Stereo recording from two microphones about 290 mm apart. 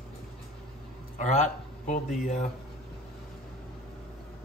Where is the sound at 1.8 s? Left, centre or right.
Left.